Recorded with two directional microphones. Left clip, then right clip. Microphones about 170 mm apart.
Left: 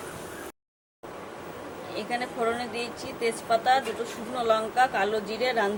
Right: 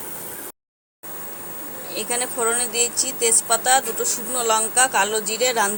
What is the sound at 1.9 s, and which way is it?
Speech, 20° right (ahead or behind).